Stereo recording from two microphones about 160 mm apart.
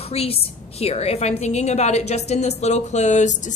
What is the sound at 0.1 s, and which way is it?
A woman's voice, 40° left (ahead or behind).